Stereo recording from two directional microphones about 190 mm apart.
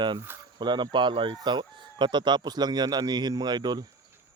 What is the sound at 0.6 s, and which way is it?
Speech, 25° right (ahead or behind).